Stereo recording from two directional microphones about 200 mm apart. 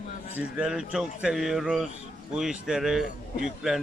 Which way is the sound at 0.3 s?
5° right (ahead or behind).